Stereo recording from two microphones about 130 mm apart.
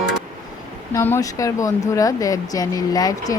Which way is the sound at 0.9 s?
20° left (ahead or behind).